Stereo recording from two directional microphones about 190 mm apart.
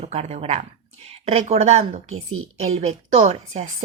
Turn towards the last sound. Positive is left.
turn(degrees=-35)  # may be behind; listen again after turning